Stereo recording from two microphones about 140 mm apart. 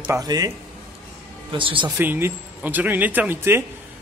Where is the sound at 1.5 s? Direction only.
35° right (ahead or behind).